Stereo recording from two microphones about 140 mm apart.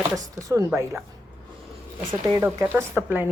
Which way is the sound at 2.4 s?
15° right (ahead or behind).